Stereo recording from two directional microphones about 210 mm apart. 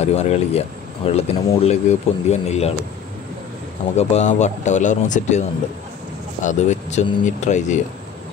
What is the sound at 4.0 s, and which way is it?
Speech, 35° left (ahead or behind).